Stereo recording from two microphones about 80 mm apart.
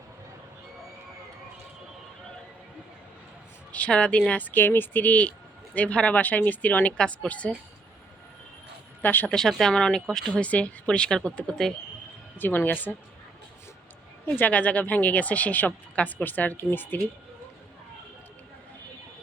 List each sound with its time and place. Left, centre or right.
3.7 s speech: centre
9.0 s speech: left
9.3 s speech: centre
12.4 s speech: left
14.3 s speech: centre